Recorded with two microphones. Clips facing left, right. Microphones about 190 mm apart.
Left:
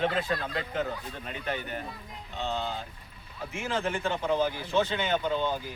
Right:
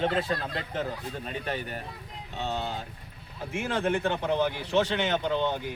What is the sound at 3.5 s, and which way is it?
Speech, 55° right (ahead or behind).